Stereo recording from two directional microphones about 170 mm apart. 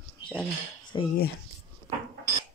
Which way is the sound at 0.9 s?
25° left (ahead or behind).